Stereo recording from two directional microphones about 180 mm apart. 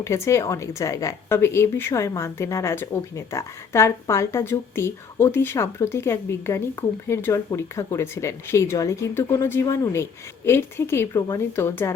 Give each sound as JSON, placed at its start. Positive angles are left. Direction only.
{"t": 0.0, "sound": "a woman's voice", "side_deg": 15}